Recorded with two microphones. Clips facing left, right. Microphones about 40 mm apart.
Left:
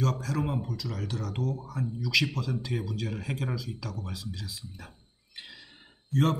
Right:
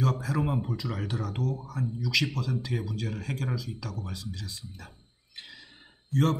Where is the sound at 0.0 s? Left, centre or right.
Centre.